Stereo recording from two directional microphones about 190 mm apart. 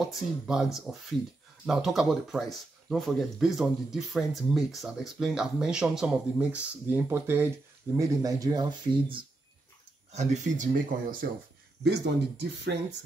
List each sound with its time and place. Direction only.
0.0 s speech: centre (ahead or behind); by 9.2 s 25° right (ahead or behind)
10.1 s speech: 40° right (ahead or behind)
11.8 s speech: 65° right (ahead or behind)